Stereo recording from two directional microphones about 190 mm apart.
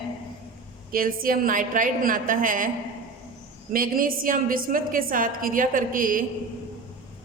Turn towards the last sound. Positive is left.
turn(degrees=-45)  # may be behind; listen again after turning